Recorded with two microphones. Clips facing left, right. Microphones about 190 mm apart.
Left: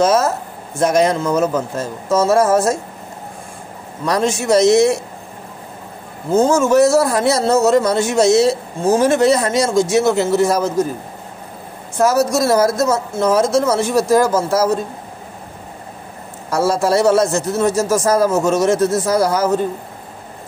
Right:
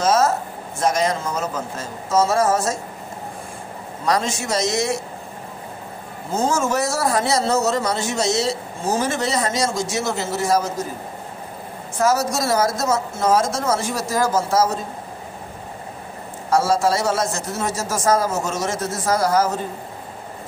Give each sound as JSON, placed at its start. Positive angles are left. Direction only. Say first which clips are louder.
{"t": 0.0, "sound": "a sound", "louder": "left 3 dB", "side_deg": 60}
{"t": 0.7, "sound": "a man's voice", "louder": "left 6 dB", "side_deg": 60}
{"t": 4.0, "sound": "a man's voice", "louder": "left 4 dB", "side_deg": 60}
{"t": 6.3, "sound": "a man's voice", "louder": "left 8 dB", "side_deg": 60}
{"t": 12.1, "sound": "a man's voice", "louder": "left 5 dB", "side_deg": 60}
{"t": 16.5, "sound": "a man's voice", "louder": "left 3 dB", "side_deg": 60}